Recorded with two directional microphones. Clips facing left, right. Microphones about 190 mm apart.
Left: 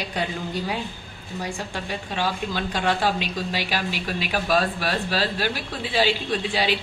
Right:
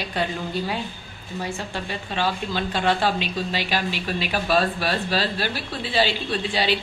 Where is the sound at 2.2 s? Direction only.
10° left (ahead or behind).